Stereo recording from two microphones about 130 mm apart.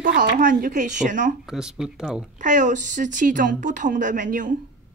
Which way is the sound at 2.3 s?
75° right (ahead or behind).